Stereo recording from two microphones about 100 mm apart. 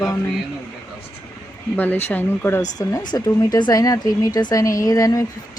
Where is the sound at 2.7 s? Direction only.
45° left (ahead or behind).